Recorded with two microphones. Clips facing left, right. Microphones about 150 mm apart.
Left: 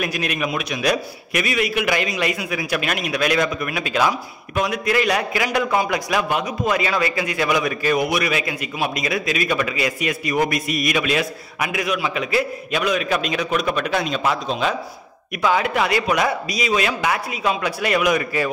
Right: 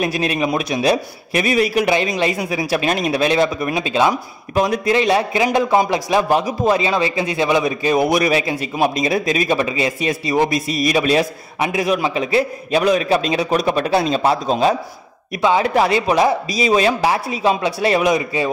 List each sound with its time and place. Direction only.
0.0 s a man's voice: 30° right (ahead or behind)